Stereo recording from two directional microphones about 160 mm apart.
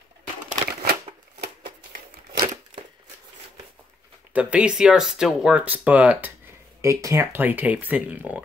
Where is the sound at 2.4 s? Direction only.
25° right (ahead or behind).